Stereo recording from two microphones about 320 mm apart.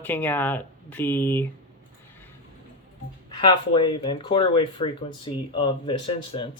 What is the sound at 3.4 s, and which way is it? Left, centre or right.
Speech, centre.